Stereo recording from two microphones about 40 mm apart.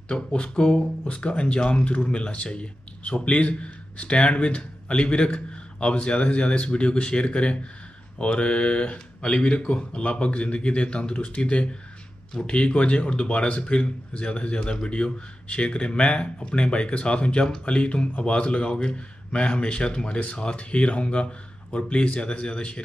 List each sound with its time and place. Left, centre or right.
0.1 s speech: left